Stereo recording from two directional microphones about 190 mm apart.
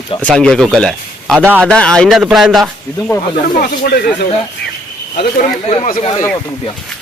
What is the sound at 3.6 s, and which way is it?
Speech, 55° left (ahead or behind).